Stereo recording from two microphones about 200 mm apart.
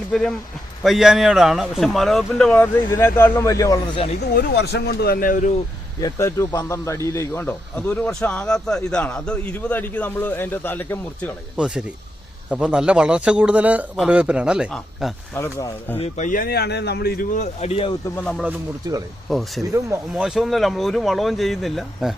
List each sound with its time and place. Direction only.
0.1 s speech: centre (ahead or behind)
4.2 s speech: 55° left (ahead or behind); by 5.5 s 40° left (ahead or behind)
6.0 s a man's voice: 15° left (ahead or behind)
11.5 s speech: 5° right (ahead or behind)
15.4 s a man's voice: 15° left (ahead or behind)
16.0 s speech: 35° left (ahead or behind)
18.0 s a man's voice: 5° left (ahead or behind)
18.4 s speech: 15° right (ahead or behind)
19.3 s speech: centre (ahead or behind)
19.7 s speech: 15° right (ahead or behind)
20.2 s speech: centre (ahead or behind)